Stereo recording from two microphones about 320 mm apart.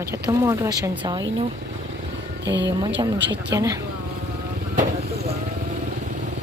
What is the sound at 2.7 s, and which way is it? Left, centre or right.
Speech, centre.